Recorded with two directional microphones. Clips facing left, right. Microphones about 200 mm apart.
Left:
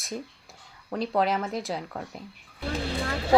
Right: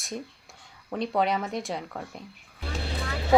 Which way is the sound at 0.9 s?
Centre (ahead or behind).